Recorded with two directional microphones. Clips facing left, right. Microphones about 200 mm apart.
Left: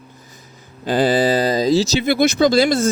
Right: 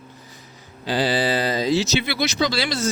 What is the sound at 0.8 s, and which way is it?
Speech, 50° left (ahead or behind).